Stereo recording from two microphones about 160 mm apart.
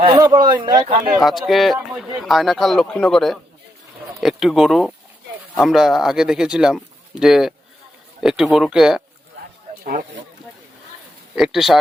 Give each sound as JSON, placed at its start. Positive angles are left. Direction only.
{"t": 0.2, "sound": "speech", "side_deg": -25}
{"t": 1.2, "sound": "speech", "side_deg": 0}
{"t": 11.3, "sound": "speech", "side_deg": 0}